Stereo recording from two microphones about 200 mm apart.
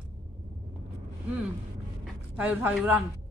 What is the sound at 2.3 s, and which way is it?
Speech, 10° right (ahead or behind).